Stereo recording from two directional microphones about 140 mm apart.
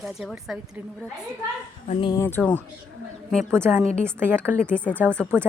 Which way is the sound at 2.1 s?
15° left (ahead or behind).